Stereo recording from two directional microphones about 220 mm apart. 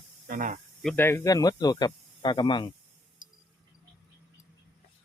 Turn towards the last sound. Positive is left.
turn(degrees=35)  # may be behind; listen again after turning